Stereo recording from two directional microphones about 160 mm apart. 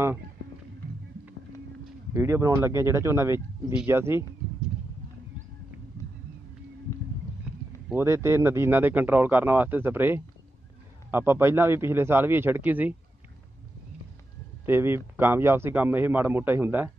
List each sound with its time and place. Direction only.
2.1 s speech: 15° right (ahead or behind)
7.9 s speech: 15° right (ahead or behind)
14.7 s speech: 15° right (ahead or behind)